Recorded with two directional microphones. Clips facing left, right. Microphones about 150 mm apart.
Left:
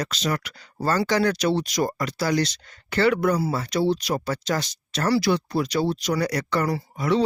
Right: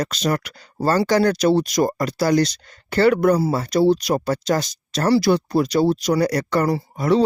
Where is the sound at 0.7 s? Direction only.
30° right (ahead or behind).